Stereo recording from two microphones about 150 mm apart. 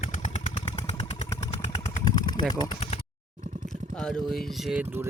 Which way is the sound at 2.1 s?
30° left (ahead or behind).